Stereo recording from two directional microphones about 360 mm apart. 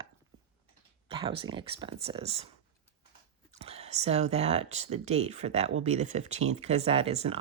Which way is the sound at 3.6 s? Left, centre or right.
Centre.